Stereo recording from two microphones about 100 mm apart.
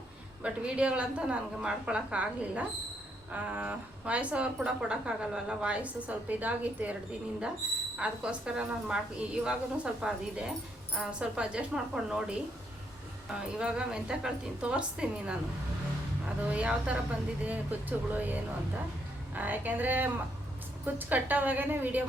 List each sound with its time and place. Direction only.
0.4 s a woman's voice: 10° right (ahead or behind)
7.9 s a woman's voice: 10° right (ahead or behind)